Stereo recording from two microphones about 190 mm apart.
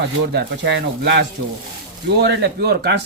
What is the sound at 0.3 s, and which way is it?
Speech, 65° right (ahead or behind).